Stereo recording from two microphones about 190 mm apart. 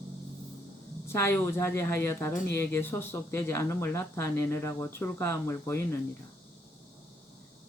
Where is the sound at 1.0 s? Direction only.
15° left (ahead or behind).